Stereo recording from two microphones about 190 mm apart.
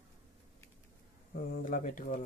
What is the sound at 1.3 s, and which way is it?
Speech, 45° left (ahead or behind).